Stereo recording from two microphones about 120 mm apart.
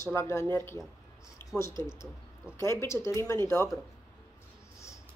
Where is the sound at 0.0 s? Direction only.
20° left (ahead or behind).